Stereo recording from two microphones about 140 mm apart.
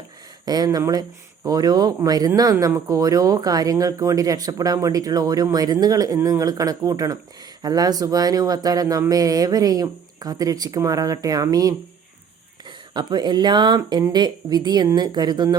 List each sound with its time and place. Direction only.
0.4 s a woman's voice: 30° right (ahead or behind)